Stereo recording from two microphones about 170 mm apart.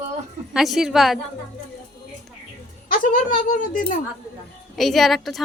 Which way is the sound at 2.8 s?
55° left (ahead or behind).